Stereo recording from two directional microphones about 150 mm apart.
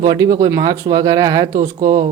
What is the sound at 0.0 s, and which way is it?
Speech, 25° right (ahead or behind).